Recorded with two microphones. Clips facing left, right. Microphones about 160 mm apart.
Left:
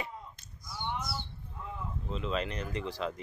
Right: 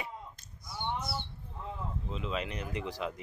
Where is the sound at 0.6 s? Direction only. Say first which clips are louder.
Right 1 dB; 25° right (ahead or behind).